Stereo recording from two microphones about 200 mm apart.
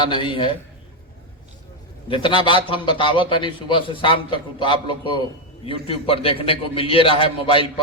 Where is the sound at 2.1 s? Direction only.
25° left (ahead or behind).